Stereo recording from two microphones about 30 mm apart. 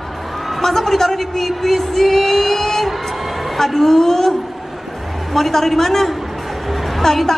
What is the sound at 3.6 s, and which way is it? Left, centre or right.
Speech, centre.